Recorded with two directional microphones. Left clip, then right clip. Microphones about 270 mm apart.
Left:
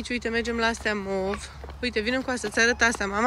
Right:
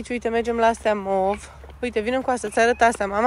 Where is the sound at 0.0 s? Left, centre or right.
Centre.